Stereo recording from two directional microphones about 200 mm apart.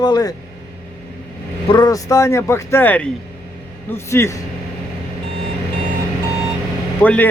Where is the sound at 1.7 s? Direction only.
20° left (ahead or behind).